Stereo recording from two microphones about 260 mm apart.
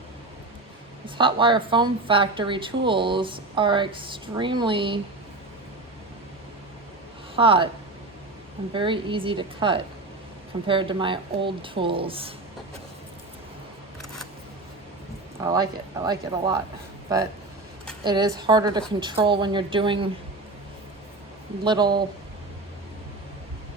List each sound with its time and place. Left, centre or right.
1.0 s a woman's voice: centre
7.3 s a woman's voice: centre
8.7 s a woman's voice: centre
15.4 s speech: centre
18.0 s a woman's voice: centre
21.6 s speech: centre